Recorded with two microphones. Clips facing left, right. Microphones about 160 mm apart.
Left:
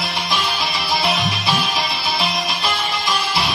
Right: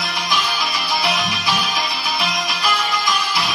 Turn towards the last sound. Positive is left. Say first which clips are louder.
# left 1 dB
turn(degrees=20)  # may be behind; listen again after turning